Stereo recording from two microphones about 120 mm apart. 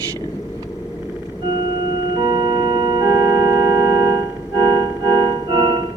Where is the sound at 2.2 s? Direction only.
35° right (ahead or behind).